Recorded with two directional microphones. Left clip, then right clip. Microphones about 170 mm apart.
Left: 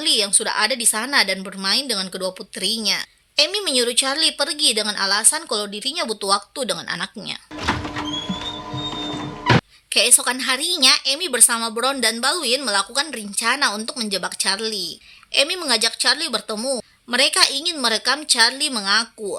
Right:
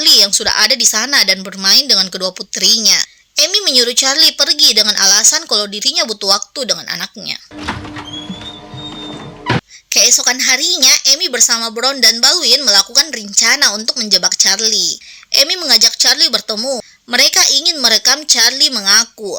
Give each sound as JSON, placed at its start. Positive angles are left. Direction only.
{"t": 0.0, "sound": "a woman's voice", "side_deg": -20}
{"t": 9.5, "sound": "music", "side_deg": 0}
{"t": 9.9, "sound": "a woman's voice", "side_deg": -10}